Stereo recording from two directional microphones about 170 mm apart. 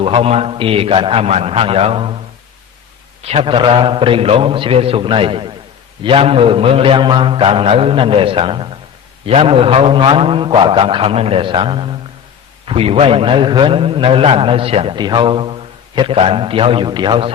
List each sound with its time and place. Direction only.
0.0 s a man's voice: 35° right (ahead or behind)
3.2 s a man's voice: 35° right (ahead or behind)